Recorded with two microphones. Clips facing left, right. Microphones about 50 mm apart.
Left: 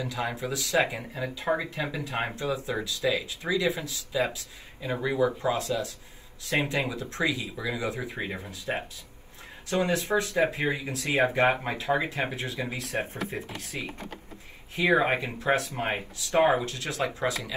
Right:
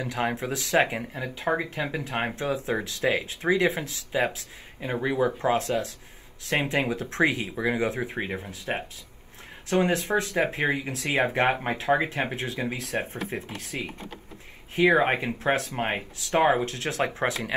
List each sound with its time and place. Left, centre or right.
0.0 s speech: right